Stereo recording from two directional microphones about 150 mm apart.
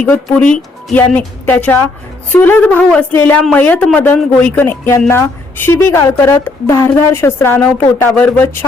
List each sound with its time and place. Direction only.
0.0 s speech: 10° left (ahead or behind)